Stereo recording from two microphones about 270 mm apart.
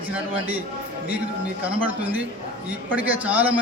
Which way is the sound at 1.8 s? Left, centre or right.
Centre.